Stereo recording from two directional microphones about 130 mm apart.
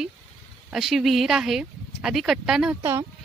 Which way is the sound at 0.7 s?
Centre (ahead or behind).